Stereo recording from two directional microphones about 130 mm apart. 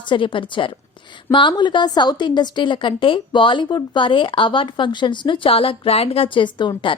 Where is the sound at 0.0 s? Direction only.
40° left (ahead or behind).